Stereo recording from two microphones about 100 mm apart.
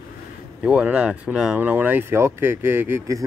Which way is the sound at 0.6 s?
10° right (ahead or behind).